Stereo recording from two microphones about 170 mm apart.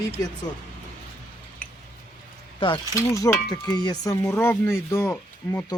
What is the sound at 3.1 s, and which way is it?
Speech, 20° left (ahead or behind).